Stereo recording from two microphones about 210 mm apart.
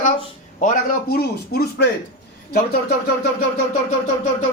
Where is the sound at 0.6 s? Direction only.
45° left (ahead or behind).